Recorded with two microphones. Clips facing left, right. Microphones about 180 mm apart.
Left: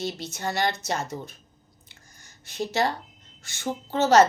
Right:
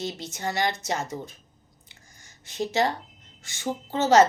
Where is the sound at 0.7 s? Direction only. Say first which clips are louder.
Even; 65° left (ahead or behind).